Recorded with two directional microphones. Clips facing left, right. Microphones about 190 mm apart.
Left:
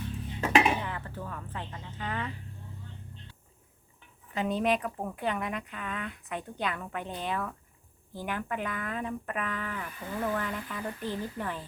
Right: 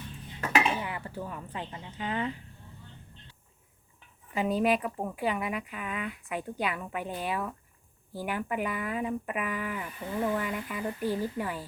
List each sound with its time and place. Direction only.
0.4 s dishes: 15° left (ahead or behind)
0.8 s speech: 10° right (ahead or behind)
4.4 s speech: 5° right (ahead or behind)